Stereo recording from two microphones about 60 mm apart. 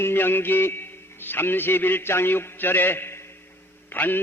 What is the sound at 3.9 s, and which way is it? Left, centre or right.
Mantra, left.